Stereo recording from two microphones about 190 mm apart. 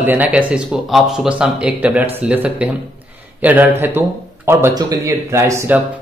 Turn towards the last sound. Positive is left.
turn(degrees=-15)  # may be behind; listen again after turning